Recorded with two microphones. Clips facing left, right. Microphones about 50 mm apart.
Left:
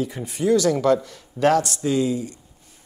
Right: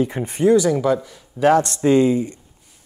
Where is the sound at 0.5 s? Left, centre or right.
Centre.